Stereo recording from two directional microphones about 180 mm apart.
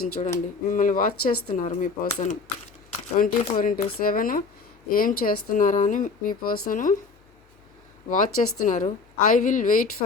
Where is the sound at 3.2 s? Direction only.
50° left (ahead or behind).